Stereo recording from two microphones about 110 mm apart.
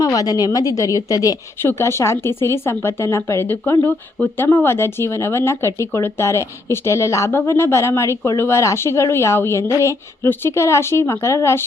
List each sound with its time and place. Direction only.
0.0 s a woman's voice: 35° left (ahead or behind)